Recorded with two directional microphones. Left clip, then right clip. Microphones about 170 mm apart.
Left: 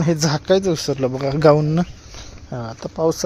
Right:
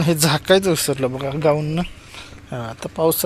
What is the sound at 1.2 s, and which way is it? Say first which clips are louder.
Speech: left 7 dB; 50° left (ahead or behind).